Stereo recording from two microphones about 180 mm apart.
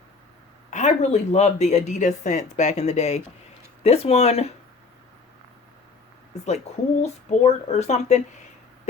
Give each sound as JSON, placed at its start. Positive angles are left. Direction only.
{"t": 0.7, "sound": "speech", "side_deg": 40}
{"t": 7.0, "sound": "speech", "side_deg": 35}